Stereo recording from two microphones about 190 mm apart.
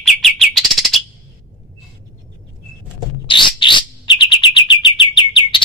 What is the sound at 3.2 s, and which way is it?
Bird, 25° left (ahead or behind).